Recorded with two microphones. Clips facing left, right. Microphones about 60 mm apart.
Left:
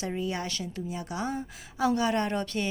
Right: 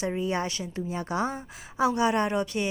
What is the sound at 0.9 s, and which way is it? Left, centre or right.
A woman's voice, right.